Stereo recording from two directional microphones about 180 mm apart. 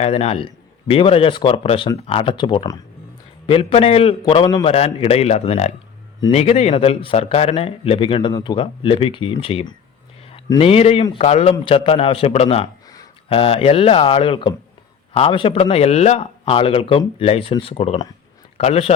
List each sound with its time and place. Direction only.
0.0 s a man's voice: 35° left (ahead or behind)